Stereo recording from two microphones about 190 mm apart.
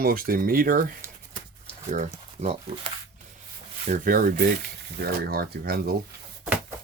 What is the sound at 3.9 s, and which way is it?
Speech, 45° right (ahead or behind).